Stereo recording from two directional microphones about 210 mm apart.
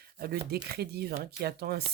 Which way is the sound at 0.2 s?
45° right (ahead or behind).